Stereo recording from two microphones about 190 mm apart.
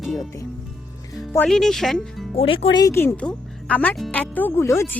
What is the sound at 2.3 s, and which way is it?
Speech, 30° left (ahead or behind).